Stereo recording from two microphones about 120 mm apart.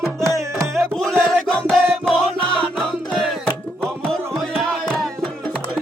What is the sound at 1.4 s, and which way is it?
Battle cry, 5° left (ahead or behind).